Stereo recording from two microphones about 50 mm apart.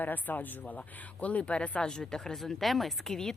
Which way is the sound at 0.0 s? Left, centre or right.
Left.